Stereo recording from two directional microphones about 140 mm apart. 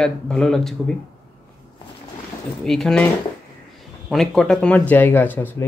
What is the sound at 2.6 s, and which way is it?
Speech, 5° left (ahead or behind).